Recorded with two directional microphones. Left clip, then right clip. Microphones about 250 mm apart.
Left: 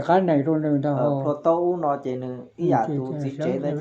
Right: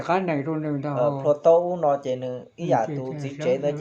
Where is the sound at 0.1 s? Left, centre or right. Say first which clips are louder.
Left 5 dB; centre.